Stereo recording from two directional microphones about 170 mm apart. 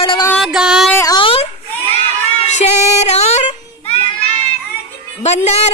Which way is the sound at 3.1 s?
40° left (ahead or behind).